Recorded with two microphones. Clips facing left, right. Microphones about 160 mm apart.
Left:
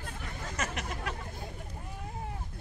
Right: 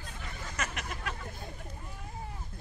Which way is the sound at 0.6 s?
30° left (ahead or behind).